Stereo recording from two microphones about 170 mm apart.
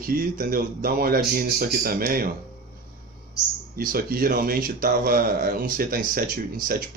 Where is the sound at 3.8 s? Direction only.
60° right (ahead or behind).